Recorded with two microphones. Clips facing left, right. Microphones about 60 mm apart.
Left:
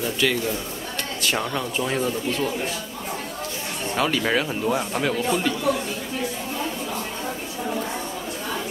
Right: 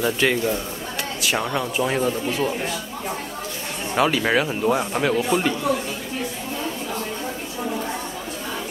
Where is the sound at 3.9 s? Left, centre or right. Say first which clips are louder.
Right 3 dB; centre.